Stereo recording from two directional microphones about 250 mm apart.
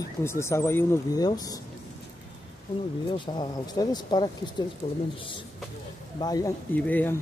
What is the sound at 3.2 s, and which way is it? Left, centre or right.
Speech, centre.